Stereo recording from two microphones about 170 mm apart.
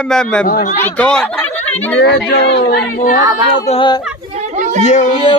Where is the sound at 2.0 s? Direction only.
85° left.